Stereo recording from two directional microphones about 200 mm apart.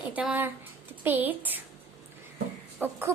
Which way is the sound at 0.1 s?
5° right (ahead or behind).